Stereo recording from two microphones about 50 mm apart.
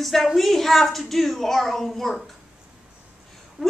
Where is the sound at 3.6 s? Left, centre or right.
Centre.